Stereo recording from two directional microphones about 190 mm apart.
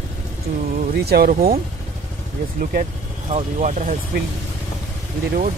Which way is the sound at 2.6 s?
45° right (ahead or behind).